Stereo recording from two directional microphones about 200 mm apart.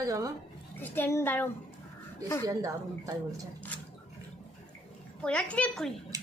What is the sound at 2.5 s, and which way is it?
Speech, 15° right (ahead or behind).